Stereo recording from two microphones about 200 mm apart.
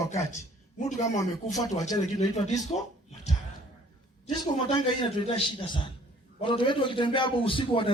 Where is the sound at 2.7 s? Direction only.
30° left (ahead or behind).